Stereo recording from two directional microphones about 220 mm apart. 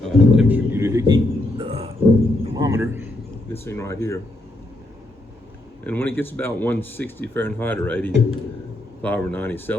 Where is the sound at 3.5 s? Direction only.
10° left (ahead or behind).